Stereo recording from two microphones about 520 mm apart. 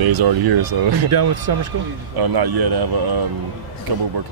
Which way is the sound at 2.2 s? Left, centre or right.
Right.